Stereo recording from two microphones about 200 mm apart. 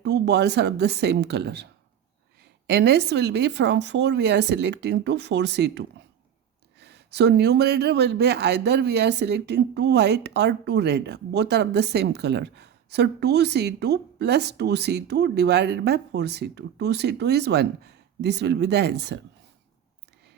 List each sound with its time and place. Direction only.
0.0 s speech: 55° right (ahead or behind)
2.6 s speech: 55° right (ahead or behind)